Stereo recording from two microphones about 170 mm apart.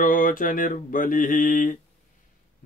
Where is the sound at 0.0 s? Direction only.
55° left (ahead or behind).